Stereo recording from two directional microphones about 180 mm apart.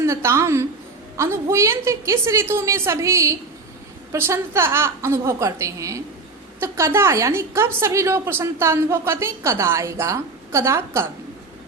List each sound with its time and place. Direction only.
0.0 s a woman's voice: 15° right (ahead or behind)